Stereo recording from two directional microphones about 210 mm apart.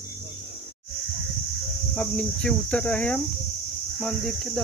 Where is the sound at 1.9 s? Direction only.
5° left (ahead or behind).